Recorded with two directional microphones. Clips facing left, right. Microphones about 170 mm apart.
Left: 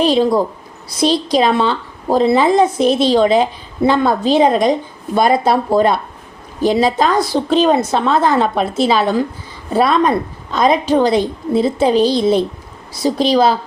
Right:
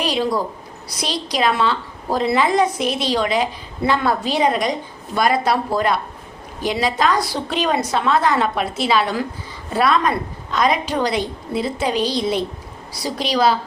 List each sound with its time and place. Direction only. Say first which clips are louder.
0.0 s a woman's voice: left 7 dB; 25° left (ahead or behind)